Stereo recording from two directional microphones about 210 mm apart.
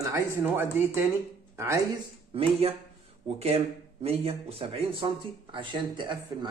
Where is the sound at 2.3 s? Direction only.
25° right (ahead or behind).